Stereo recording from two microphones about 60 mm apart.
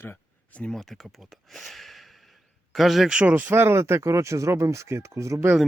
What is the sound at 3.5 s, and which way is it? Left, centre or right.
Speech, right.